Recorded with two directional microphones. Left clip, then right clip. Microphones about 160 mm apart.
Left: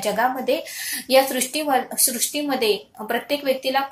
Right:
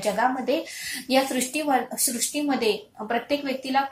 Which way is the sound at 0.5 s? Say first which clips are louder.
Left 3 dB; 30° left (ahead or behind).